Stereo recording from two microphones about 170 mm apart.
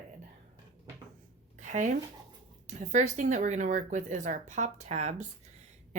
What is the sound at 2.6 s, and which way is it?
Speech, 45° right (ahead or behind).